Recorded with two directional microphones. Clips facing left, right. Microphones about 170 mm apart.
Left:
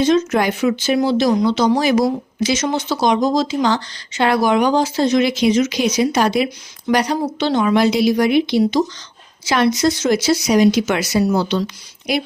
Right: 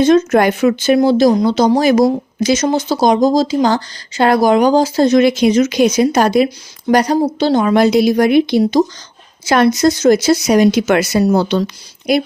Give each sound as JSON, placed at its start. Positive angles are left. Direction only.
{"t": 0.0, "sound": "speech", "side_deg": -50}